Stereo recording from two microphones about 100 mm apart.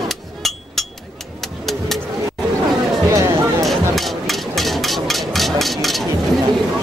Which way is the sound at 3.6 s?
Centre (ahead or behind).